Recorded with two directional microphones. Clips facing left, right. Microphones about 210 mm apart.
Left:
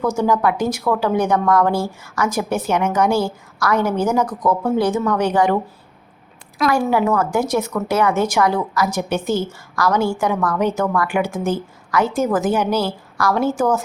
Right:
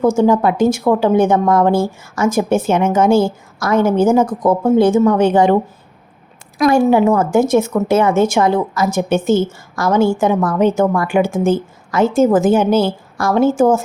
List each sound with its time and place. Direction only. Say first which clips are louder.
0.0 s a woman's voice: right 5 dB; 25° right (ahead or behind)
6.7 s a woman's voice: right 6 dB; 25° right (ahead or behind)